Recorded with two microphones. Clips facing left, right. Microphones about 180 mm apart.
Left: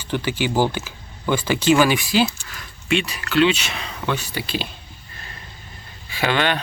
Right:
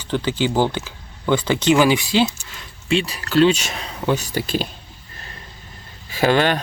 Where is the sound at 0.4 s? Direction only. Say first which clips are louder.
Right 1 dB; 10° left (ahead or behind).